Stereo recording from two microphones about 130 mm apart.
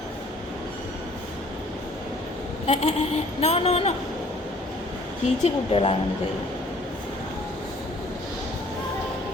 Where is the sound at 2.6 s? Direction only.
50° left (ahead or behind).